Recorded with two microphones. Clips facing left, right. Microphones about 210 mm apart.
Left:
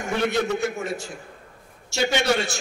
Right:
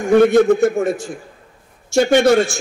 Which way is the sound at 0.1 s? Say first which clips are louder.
Right 13 dB; 50° right (ahead or behind).